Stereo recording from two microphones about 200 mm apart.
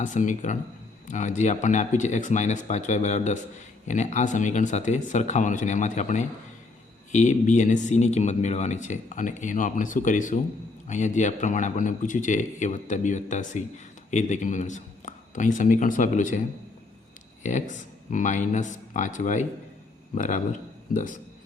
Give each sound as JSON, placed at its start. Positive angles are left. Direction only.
{"t": 0.0, "sound": "speech", "side_deg": 40}
{"t": 17.4, "sound": "speech", "side_deg": 40}